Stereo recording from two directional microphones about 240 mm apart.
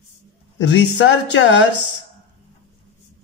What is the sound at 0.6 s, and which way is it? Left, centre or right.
A woman's voice, left.